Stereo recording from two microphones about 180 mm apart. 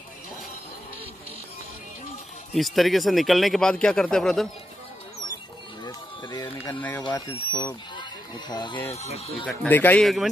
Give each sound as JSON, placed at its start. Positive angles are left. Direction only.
{"t": 2.5, "sound": "speech", "side_deg": 0}
{"t": 5.9, "sound": "a sound", "side_deg": 20}
{"t": 6.7, "sound": "speech", "side_deg": 10}
{"t": 8.9, "sound": "speech", "side_deg": 35}
{"t": 9.5, "sound": "speech", "side_deg": 5}